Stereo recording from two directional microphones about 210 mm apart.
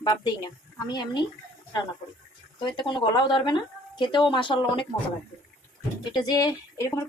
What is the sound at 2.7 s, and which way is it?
Speech, 25° left (ahead or behind).